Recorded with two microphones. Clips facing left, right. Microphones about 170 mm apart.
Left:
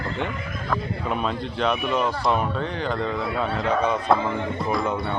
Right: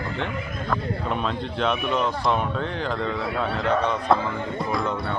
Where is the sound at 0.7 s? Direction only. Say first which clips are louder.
Even; 5° left (ahead or behind).